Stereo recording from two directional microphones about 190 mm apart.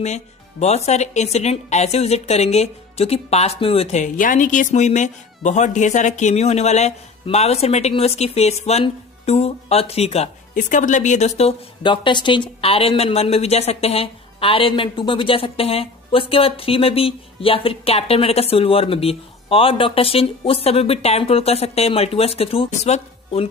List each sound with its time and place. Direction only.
0.0 s speech: 35° left (ahead or behind)